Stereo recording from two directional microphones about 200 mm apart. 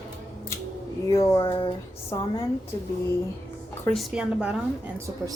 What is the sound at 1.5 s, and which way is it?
Speech, 25° left (ahead or behind).